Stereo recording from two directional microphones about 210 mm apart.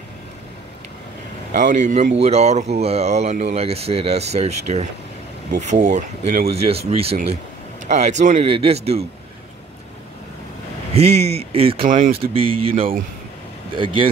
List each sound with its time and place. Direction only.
1.5 s speech: 40° right (ahead or behind)
11.0 s speech: 30° right (ahead or behind)